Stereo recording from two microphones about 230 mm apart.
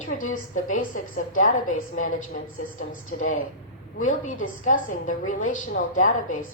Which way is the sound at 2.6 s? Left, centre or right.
Left.